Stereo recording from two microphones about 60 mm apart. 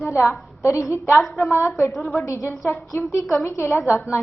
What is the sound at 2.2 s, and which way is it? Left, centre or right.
Speech, left.